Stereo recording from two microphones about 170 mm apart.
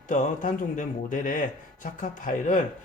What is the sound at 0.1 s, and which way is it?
Speech, 50° left (ahead or behind).